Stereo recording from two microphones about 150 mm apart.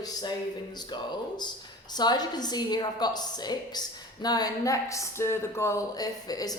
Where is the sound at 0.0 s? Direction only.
25° left (ahead or behind).